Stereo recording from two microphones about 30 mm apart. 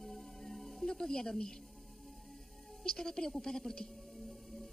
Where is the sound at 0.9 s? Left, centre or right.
Left.